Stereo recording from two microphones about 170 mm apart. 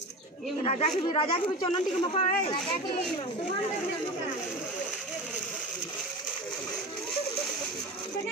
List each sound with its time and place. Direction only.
0.7 s speech: 35° left (ahead or behind)